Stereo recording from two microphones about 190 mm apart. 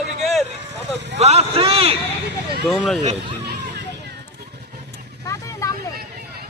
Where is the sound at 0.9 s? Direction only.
65° right (ahead or behind).